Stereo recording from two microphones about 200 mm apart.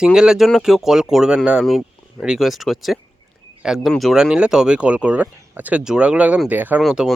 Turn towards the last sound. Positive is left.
turn(degrees=0)  # may be behind; listen again after turning